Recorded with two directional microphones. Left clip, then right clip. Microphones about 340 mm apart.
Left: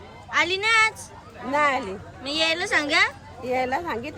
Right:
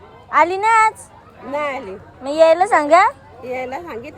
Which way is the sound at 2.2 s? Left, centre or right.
Centre.